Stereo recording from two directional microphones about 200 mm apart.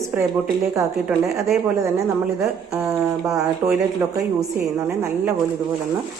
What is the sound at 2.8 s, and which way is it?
A woman's voice, 15° right (ahead or behind).